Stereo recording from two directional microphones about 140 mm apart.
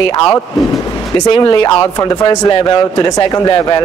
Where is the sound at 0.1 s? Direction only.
30° left (ahead or behind).